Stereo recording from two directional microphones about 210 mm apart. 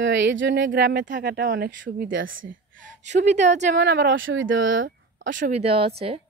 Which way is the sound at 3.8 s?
55° right (ahead or behind).